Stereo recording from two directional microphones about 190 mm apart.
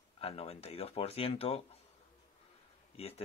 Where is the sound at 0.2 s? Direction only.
30° left (ahead or behind).